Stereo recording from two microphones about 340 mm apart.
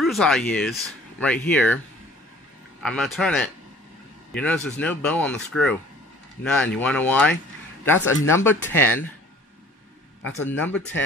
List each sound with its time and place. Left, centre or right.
0.0 s speech: centre
2.8 s speech: centre
10.2 s a man's voice: left
10.6 s speech: centre